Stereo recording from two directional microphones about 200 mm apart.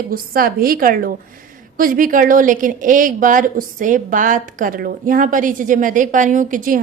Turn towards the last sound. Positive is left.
turn(degrees=-40)  # may be behind; listen again after turning